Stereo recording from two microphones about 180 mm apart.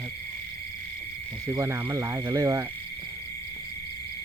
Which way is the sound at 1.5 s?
20° right (ahead or behind).